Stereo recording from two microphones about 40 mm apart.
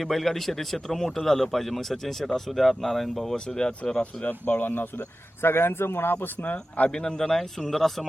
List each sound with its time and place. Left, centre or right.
0.0 s speech: centre
3.3 s speech: centre
4.0 s speech: left
4.4 s speech: left
6.4 s speech: left
6.9 s speech: centre